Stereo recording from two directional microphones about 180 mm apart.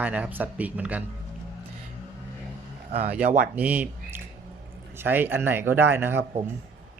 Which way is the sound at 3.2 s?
50° right (ahead or behind).